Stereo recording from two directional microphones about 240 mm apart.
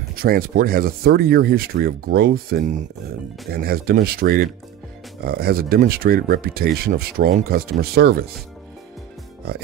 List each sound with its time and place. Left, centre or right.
0.1 s speech: right